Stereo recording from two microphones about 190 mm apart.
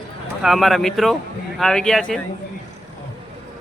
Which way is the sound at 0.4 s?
Centre (ahead or behind).